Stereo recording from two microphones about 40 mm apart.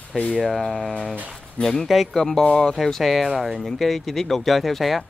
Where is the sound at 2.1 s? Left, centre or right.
Centre.